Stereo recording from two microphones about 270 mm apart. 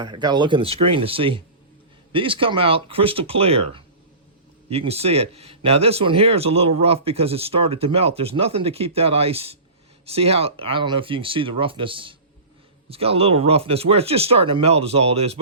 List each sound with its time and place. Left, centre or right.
0.0 s speech: centre